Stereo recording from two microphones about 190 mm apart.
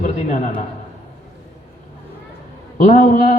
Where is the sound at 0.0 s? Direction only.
40° left (ahead or behind).